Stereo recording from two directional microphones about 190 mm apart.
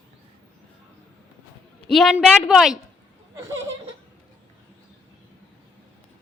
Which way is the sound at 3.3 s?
15° right (ahead or behind).